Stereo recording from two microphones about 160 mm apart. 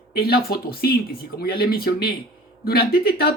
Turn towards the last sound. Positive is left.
turn(degrees=75)  # may be behind; listen again after turning